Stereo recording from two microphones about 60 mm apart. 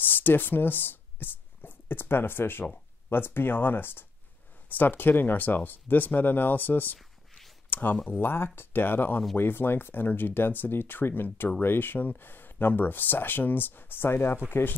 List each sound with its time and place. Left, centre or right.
0.0 s speech: left
7.0 s a sound: centre
7.7 s speech: left